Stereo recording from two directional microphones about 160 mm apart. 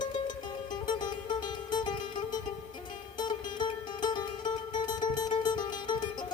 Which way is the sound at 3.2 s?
30° left (ahead or behind).